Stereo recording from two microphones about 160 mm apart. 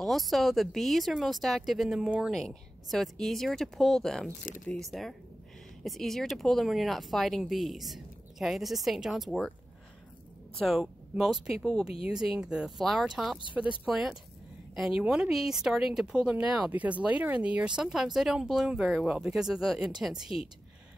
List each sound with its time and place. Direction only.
0.0 s speech: centre (ahead or behind)
10.6 s speech: centre (ahead or behind)